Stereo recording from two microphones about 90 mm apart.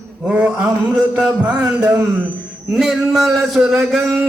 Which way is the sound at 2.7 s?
Centre (ahead or behind).